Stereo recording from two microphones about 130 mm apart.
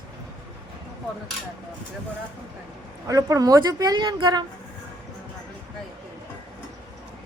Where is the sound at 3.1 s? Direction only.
25° right (ahead or behind).